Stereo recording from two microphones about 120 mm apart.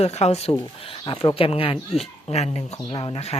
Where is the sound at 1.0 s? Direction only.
45° left (ahead or behind).